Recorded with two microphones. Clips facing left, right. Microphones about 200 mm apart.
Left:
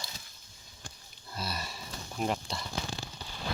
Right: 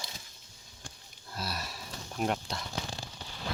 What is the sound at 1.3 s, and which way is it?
Livestock, centre (ahead or behind).